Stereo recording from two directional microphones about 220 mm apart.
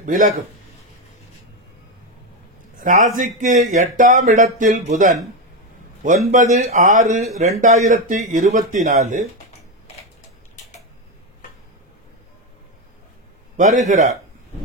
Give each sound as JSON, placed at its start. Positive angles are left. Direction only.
{"t": 0.0, "sound": "speech", "side_deg": -40}
{"t": 3.2, "sound": "speech", "side_deg": -35}
{"t": 13.6, "sound": "speech", "side_deg": -35}